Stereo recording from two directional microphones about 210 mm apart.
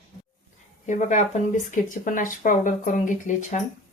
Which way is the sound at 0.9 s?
35° left (ahead or behind).